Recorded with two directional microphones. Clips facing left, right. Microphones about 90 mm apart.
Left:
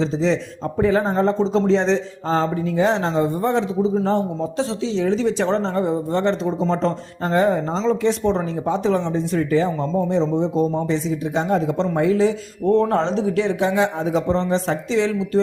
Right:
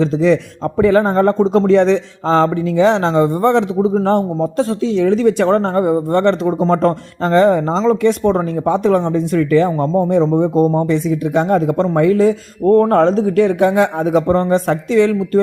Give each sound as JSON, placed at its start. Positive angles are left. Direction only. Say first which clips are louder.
{"t": 0.0, "sound": "speech", "louder": "right 6 dB", "side_deg": -60}
{"t": 4.4, "sound": "speech", "louder": "right 6 dB", "side_deg": -50}
{"t": 7.3, "sound": "speech", "louder": "right 6 dB", "side_deg": -80}